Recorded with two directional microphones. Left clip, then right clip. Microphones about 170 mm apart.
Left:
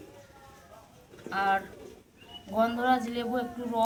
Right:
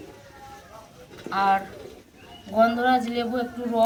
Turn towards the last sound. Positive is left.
turn(degrees=0)  # may be behind; listen again after turning